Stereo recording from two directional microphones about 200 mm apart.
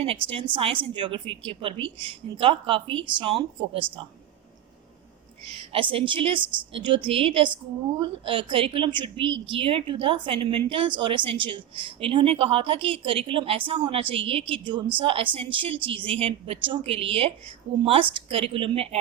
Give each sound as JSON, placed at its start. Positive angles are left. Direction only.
{"t": 0.3, "sound": "a woman's voice", "side_deg": -25}
{"t": 5.5, "sound": "a woman's voice", "side_deg": -25}